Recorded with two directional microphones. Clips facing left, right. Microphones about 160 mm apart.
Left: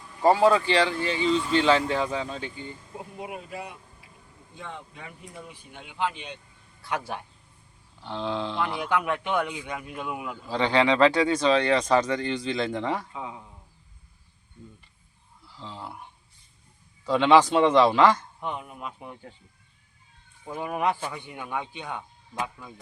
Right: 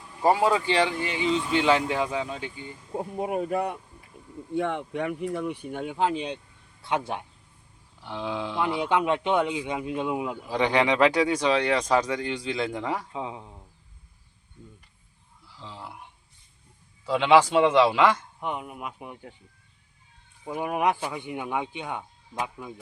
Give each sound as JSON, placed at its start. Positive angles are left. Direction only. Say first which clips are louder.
{"t": 0.1, "sound": "speech", "louder": "left 2 dB", "side_deg": -10}
{"t": 2.9, "sound": "speech", "louder": "right 11 dB", "side_deg": -40}
{"t": 4.5, "sound": "speech", "louder": "right 14 dB", "side_deg": -65}
{"t": 6.8, "sound": "speech", "louder": "right 3 dB", "side_deg": -20}
{"t": 8.0, "sound": "speech", "louder": "left 1 dB", "side_deg": -10}
{"t": 8.8, "sound": "speech", "louder": "right 5 dB", "side_deg": -25}
{"t": 15.5, "sound": "speech", "louder": "left 2 dB", "side_deg": 0}
{"t": 17.1, "sound": "speech", "louder": "left 1 dB", "side_deg": -5}
{"t": 20.4, "sound": "speech", "louder": "right 2 dB", "side_deg": -15}